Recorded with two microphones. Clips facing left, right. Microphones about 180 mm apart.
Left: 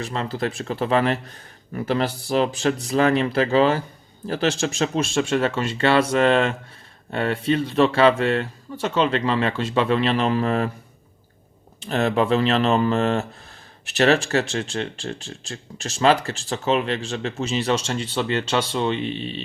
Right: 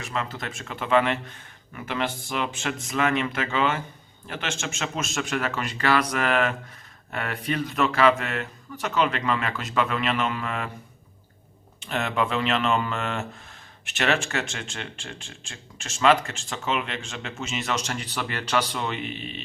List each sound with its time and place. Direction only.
0.0 s speech: 35° left (ahead or behind)
11.8 s speech: 35° left (ahead or behind)